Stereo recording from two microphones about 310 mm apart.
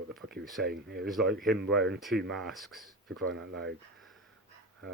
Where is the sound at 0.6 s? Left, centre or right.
Right.